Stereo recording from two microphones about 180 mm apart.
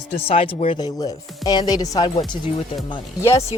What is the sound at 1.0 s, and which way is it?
Speech, 20° left (ahead or behind).